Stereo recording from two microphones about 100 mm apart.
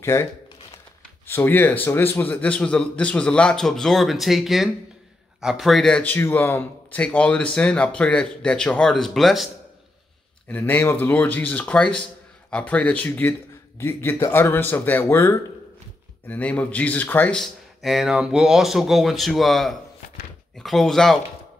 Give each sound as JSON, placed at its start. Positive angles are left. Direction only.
{"t": 0.0, "sound": "a man's voice", "side_deg": 30}
{"t": 6.1, "sound": "a man's voice", "side_deg": 20}
{"t": 10.5, "sound": "a man's voice", "side_deg": 20}
{"t": 16.3, "sound": "a man's voice", "side_deg": 15}
{"t": 17.4, "sound": "speech", "side_deg": 0}